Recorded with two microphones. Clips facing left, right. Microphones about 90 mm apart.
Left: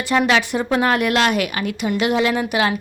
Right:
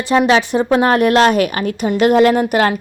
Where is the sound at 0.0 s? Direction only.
25° right (ahead or behind).